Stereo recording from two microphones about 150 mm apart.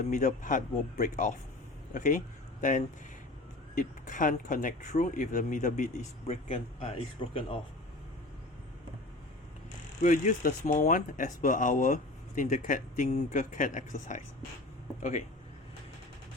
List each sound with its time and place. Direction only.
0.1 s speech: 55° left (ahead or behind); by 7.4 s 40° left (ahead or behind)
10.0 s speech: 60° left (ahead or behind)